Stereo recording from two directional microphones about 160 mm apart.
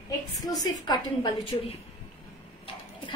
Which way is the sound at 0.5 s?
25° left (ahead or behind).